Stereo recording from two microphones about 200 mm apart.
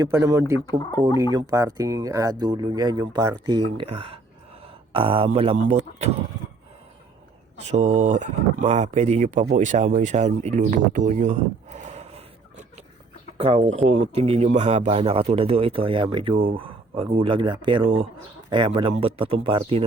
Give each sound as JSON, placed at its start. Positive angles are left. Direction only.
{"t": 0.0, "sound": "speech", "side_deg": -15}
{"t": 0.8, "sound": "speech", "side_deg": 15}
{"t": 1.2, "sound": "speech", "side_deg": -20}
{"t": 7.6, "sound": "speech", "side_deg": -35}